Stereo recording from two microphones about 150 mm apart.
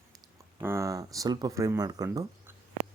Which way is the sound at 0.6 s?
20° right (ahead or behind).